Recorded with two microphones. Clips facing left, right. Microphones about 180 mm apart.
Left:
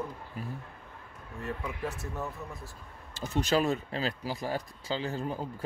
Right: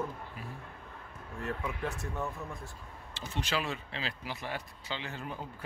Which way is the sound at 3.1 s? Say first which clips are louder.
Left 7 dB; 40° left (ahead or behind).